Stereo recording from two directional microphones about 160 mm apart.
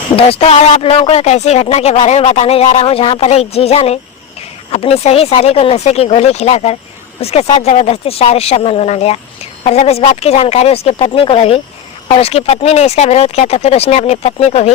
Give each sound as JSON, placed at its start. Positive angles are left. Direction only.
{"t": 0.2, "sound": "speech", "side_deg": 35}